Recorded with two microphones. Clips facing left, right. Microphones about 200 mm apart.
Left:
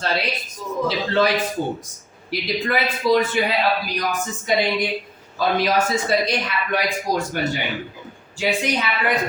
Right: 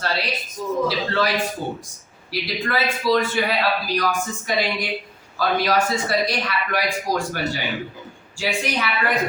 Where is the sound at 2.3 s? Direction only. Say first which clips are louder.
Left 2 dB; 20° left (ahead or behind).